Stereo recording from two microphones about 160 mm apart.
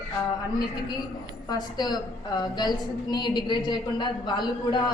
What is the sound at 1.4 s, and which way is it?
A woman's voice, 25° left (ahead or behind).